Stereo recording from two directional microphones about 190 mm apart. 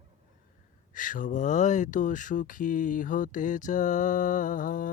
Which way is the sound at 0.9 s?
45° left (ahead or behind).